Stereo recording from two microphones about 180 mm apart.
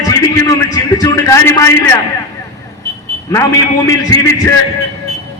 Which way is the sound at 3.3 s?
15° left (ahead or behind).